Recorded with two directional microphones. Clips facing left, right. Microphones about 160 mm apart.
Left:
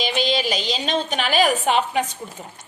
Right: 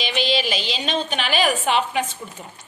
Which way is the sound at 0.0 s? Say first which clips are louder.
Left 1 dB; 40° left (ahead or behind).